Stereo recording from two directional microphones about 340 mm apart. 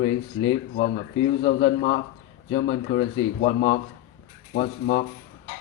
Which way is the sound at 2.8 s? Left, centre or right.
Left.